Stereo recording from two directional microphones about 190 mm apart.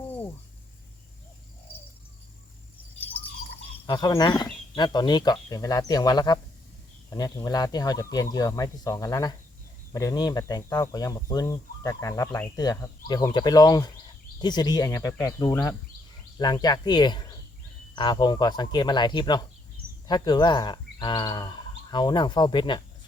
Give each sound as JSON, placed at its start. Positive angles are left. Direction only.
{"t": 3.8, "sound": "speech", "side_deg": 20}